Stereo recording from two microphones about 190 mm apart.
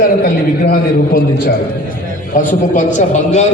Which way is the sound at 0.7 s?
55° left (ahead or behind).